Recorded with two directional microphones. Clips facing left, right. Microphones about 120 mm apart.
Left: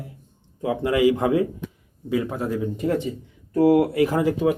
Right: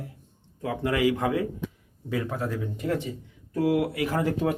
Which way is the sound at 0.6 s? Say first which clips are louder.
Left 5 dB; 20° left (ahead or behind).